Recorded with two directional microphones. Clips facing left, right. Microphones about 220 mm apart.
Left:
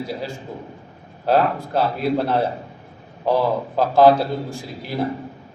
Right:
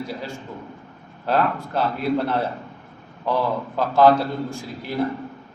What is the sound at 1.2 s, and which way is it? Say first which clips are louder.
A man's voice: left 3 dB; 40° left (ahead or behind).